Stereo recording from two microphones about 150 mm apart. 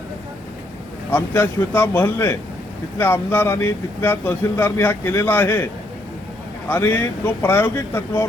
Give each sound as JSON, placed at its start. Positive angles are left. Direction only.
{"t": 1.1, "sound": "speech", "side_deg": 15}
{"t": 6.7, "sound": "speech", "side_deg": 15}